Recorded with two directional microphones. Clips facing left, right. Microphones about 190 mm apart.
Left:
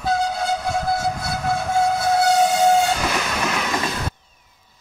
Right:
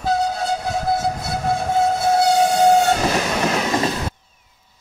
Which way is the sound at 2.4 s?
45° right (ahead or behind).